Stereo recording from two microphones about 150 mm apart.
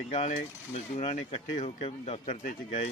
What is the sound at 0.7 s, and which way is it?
Speech, 50° left (ahead or behind).